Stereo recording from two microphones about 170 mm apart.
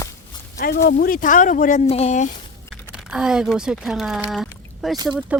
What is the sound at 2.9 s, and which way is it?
Speech, 5° right (ahead or behind).